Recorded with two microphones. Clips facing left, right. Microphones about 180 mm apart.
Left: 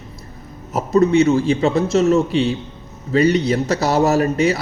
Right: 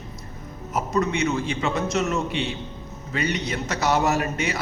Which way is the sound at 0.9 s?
35° left (ahead or behind).